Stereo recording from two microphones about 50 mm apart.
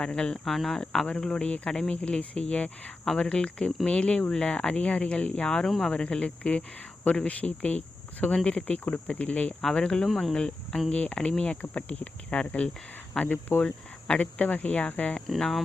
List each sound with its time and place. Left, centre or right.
0.0 s speech: centre
0.4 s speech: centre
5.6 s speech: centre
5.9 s speech: centre
9.6 s speech: centre
10.1 s speech: centre
10.3 s speech: centre
15.4 s speech: centre